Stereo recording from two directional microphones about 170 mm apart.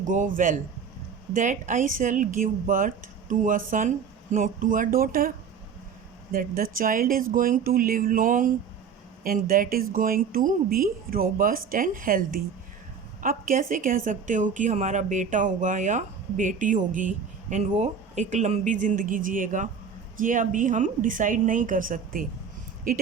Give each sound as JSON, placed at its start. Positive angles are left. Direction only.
{"t": 0.0, "sound": "a woman's voice", "side_deg": -50}
{"t": 6.3, "sound": "a woman's voice", "side_deg": -55}